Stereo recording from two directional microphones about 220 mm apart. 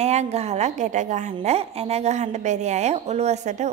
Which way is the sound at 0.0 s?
30° right (ahead or behind).